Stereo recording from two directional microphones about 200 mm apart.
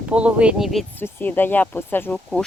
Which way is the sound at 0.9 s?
10° left (ahead or behind).